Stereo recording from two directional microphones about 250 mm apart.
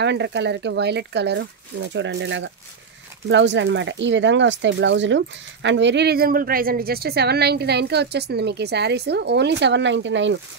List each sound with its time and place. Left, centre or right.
0.0 s speech: right